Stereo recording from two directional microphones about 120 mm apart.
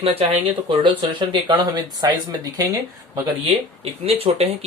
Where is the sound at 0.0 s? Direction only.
55° right (ahead or behind); by 2.7 s 30° right (ahead or behind).